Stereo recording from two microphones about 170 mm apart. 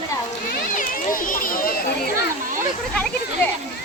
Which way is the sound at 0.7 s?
55° left (ahead or behind).